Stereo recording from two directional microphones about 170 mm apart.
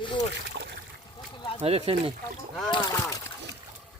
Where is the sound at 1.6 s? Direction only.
35° right (ahead or behind).